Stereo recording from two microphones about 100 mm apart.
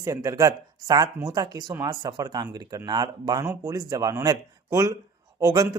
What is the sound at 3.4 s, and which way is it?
Speech, 20° right (ahead or behind).